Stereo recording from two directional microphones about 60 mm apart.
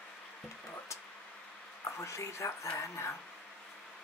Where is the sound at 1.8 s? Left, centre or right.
Left.